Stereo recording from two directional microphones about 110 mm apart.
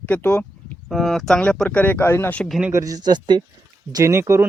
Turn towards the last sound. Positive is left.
turn(degrees=-25)  # may be behind; listen again after turning